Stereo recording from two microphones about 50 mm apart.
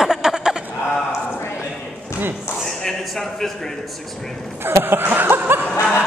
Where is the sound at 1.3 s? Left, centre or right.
Left.